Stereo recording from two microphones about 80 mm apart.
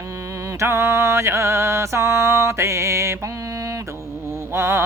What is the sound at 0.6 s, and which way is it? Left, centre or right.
Music, right.